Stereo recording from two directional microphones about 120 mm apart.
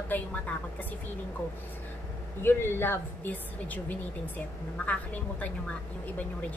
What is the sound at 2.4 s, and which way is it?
A woman's voice, 20° left (ahead or behind).